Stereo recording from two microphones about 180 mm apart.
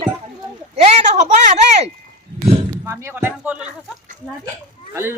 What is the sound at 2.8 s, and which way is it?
Speech, 15° right (ahead or behind).